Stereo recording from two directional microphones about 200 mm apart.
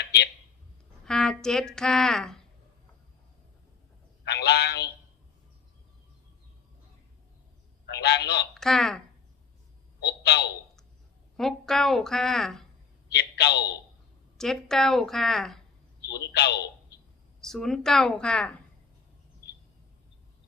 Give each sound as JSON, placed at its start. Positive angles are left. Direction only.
{"t": 0.0, "sound": "a sound", "side_deg": 55}
{"t": 1.0, "sound": "speech", "side_deg": 5}
{"t": 4.3, "sound": "a sound", "side_deg": 55}
{"t": 7.9, "sound": "a man's voice", "side_deg": 55}
{"t": 8.5, "sound": "speech", "side_deg": 0}
{"t": 10.0, "sound": "a sound", "side_deg": 55}
{"t": 11.3, "sound": "speech", "side_deg": 0}
{"t": 13.1, "sound": "a man's voice", "side_deg": 60}
{"t": 14.3, "sound": "speech", "side_deg": 0}
{"t": 16.2, "sound": "a man's voice", "side_deg": 55}
{"t": 17.4, "sound": "speech", "side_deg": 0}